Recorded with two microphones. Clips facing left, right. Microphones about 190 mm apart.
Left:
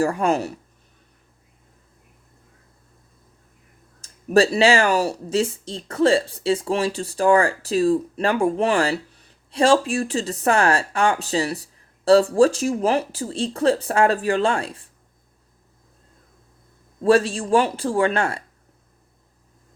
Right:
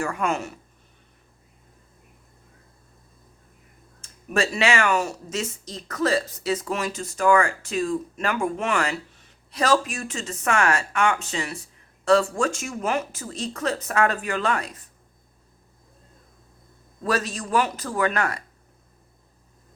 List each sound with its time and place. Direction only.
0.0 s speech: 35° left (ahead or behind)
4.0 s speech: 35° left (ahead or behind)
17.0 s speech: 30° left (ahead or behind)